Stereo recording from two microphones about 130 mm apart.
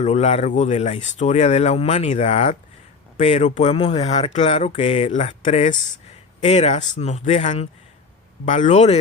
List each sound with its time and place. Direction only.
0.0 s speech: 60° left (ahead or behind)